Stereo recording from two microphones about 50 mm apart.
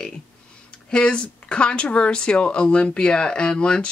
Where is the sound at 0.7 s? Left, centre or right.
Centre.